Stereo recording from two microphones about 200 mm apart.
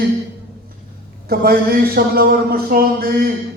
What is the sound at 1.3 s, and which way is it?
Speech, 50° right (ahead or behind).